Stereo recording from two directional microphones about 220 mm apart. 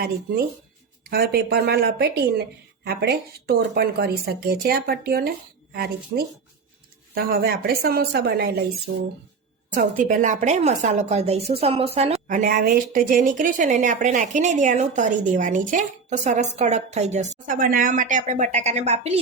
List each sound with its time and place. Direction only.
1.0 s speech: 45° right (ahead or behind)
9.7 s a woman's voice: 35° right (ahead or behind)